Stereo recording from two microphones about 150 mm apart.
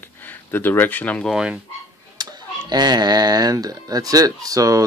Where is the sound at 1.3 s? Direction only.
5° right (ahead or behind).